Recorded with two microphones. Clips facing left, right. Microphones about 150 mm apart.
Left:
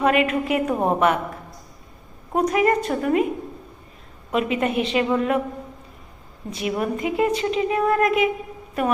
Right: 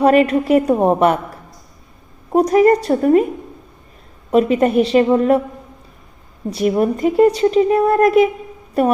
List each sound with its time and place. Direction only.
0.0 s speech: 35° right (ahead or behind)
2.3 s speech: 35° right (ahead or behind)
4.3 s speech: 40° right (ahead or behind)
6.5 s speech: 40° right (ahead or behind)